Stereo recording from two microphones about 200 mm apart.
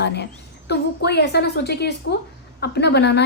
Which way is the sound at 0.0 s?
55° left (ahead or behind).